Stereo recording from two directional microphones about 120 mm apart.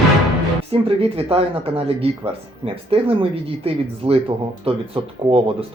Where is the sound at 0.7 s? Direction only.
55° right (ahead or behind).